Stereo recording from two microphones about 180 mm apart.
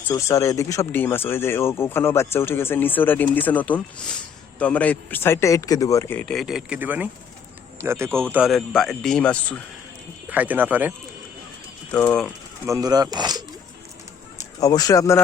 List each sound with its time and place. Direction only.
0.1 s speech: 15° left (ahead or behind)
6.2 s speech: centre (ahead or behind)
8.3 s speech: 5° right (ahead or behind)
10.2 s speech: 10° right (ahead or behind)
11.9 s speech: 10° left (ahead or behind)
12.6 s speech: 20° right (ahead or behind)
14.6 s speech: 20° left (ahead or behind)